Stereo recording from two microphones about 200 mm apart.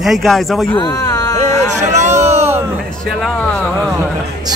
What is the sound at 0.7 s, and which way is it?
Speech, 20° left (ahead or behind).